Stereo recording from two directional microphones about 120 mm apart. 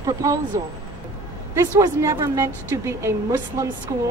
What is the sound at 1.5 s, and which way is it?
A woman's voice, 25° right (ahead or behind).